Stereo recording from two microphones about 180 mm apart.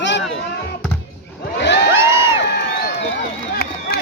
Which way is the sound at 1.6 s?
75° left (ahead or behind).